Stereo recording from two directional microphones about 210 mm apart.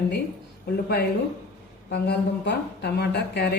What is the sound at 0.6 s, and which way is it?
Speech, 50° left (ahead or behind).